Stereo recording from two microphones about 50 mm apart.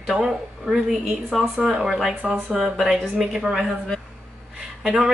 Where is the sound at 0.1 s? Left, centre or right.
Centre.